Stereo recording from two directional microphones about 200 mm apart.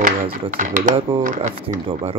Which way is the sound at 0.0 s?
40° right (ahead or behind).